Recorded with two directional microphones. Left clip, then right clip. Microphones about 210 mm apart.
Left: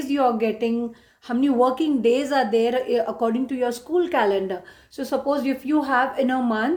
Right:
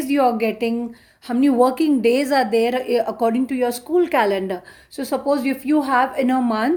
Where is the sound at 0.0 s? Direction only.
35° right (ahead or behind).